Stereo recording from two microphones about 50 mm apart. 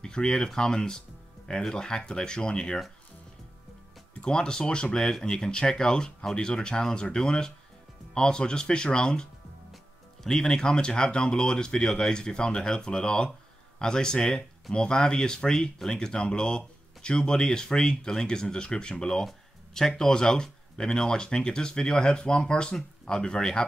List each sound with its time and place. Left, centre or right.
0.0 s speech: centre
4.2 s speech: centre